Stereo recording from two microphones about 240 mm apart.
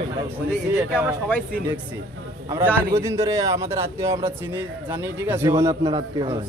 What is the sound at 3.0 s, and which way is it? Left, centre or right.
A man's voice, centre.